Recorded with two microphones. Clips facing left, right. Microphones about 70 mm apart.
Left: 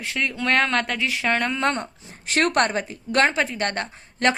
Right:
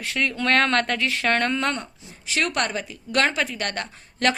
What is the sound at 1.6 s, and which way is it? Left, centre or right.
Speech, left.